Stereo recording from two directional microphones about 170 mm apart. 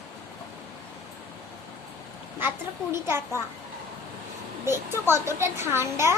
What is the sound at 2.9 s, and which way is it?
Speech, 15° right (ahead or behind).